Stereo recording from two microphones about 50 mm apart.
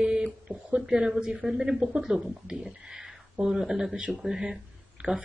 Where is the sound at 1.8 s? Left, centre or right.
Centre.